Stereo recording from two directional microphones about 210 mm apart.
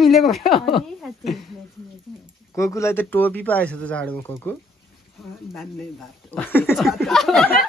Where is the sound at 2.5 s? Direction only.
15° left (ahead or behind).